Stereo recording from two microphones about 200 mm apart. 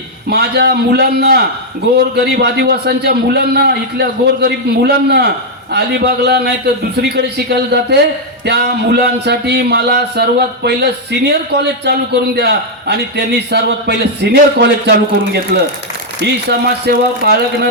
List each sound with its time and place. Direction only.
0.3 s speech: 55° right (ahead or behind)